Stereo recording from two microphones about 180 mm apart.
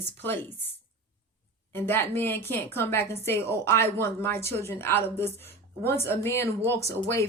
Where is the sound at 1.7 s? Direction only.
10° left (ahead or behind).